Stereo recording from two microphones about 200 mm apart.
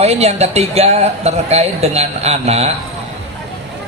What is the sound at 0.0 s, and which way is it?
A man's voice, 30° right (ahead or behind).